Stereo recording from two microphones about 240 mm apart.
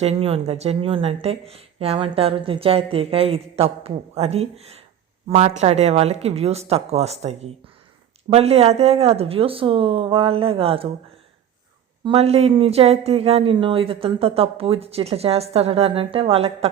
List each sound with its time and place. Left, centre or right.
0.0 s speech: right
12.0 s speech: right